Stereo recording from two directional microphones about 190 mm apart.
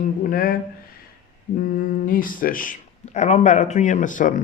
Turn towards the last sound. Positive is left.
turn(degrees=45)  # may be behind; listen again after turning